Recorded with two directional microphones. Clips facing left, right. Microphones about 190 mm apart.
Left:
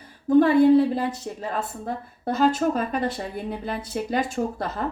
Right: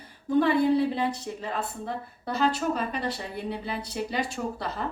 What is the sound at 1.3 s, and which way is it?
Speech, 45° left (ahead or behind).